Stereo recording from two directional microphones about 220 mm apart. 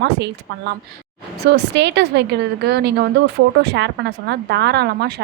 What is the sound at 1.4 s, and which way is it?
A woman's voice, 50° right (ahead or behind).